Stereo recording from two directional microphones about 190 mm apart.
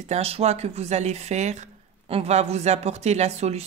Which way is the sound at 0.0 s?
35° right (ahead or behind).